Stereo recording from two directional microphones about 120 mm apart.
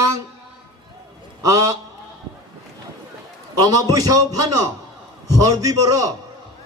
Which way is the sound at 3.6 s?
30° right (ahead or behind).